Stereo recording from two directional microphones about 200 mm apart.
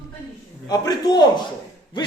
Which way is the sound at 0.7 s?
20° left (ahead or behind).